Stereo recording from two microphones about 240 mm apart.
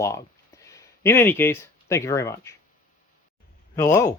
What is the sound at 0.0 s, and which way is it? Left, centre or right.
Speech, centre.